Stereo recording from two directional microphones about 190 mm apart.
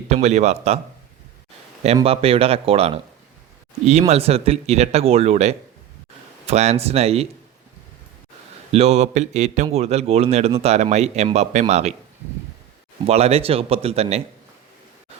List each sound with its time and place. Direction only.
0.1 s speech: 35° right (ahead or behind)
2.0 s speech: 30° right (ahead or behind)
4.1 s speech: 30° right (ahead or behind)
8.7 s speech: 35° right (ahead or behind)
13.1 s speech: 35° right (ahead or behind)